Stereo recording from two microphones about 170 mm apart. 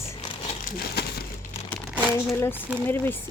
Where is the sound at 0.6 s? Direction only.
65° left (ahead or behind).